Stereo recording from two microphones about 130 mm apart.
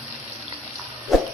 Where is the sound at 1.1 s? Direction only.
Centre (ahead or behind).